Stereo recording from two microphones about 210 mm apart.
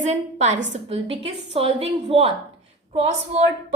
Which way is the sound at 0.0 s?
30° right (ahead or behind).